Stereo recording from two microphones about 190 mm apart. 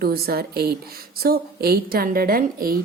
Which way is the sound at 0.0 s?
55° right (ahead or behind).